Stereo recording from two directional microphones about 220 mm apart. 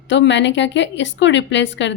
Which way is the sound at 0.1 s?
55° left (ahead or behind).